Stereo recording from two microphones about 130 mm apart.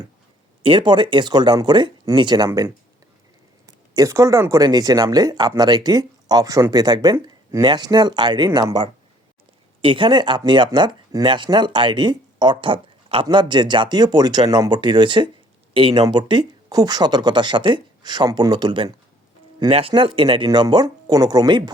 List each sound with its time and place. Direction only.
0.6 s speech: 40° right (ahead or behind)
3.7 s speech: 25° right (ahead or behind)
19.9 s speech: 40° right (ahead or behind)